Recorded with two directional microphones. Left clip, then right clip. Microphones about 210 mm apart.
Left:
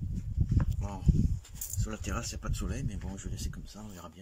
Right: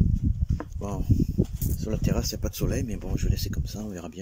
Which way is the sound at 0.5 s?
35° right (ahead or behind).